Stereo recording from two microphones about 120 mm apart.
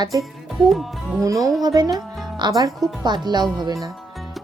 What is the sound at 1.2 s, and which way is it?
Speech, 30° right (ahead or behind).